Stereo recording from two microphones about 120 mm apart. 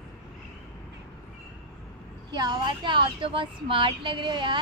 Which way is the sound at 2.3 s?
35° right (ahead or behind).